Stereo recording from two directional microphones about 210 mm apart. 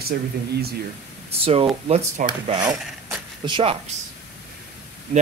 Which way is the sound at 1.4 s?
25° right (ahead or behind).